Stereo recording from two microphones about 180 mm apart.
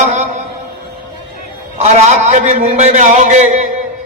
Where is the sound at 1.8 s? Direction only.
40° right (ahead or behind).